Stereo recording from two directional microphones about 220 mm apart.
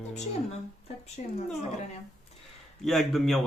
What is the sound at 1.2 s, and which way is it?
Speech, 30° left (ahead or behind).